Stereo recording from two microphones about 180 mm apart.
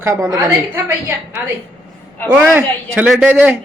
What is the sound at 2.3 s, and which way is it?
A man's voice, 10° right (ahead or behind).